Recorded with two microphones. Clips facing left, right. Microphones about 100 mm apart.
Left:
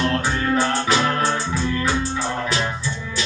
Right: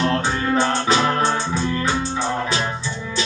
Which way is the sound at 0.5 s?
25° right (ahead or behind).